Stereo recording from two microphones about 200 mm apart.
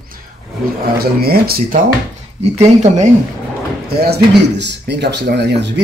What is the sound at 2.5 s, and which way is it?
Speech, 35° right (ahead or behind).